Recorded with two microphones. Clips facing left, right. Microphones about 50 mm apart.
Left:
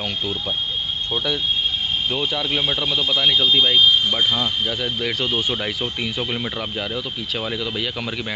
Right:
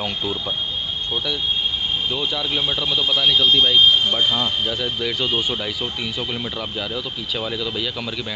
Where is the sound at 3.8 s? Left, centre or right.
Right.